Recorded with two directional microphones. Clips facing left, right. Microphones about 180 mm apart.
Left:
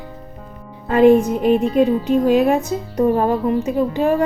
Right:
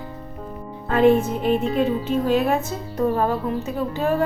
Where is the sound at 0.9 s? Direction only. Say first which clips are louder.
Left 5 dB; 15° left (ahead or behind).